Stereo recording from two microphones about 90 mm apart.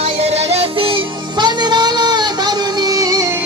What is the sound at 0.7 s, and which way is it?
Music, 85° right.